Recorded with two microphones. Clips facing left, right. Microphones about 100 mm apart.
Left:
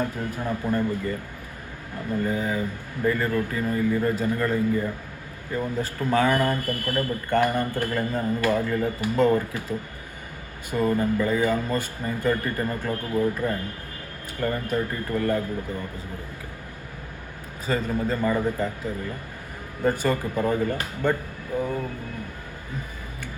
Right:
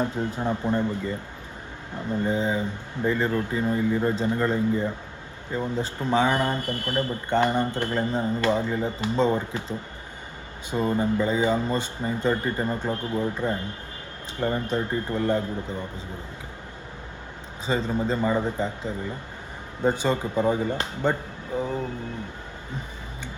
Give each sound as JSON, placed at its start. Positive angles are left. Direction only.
{"t": 0.0, "sound": "speech", "side_deg": -25}
{"t": 2.2, "sound": "speech", "side_deg": -25}
{"t": 17.7, "sound": "speech", "side_deg": -25}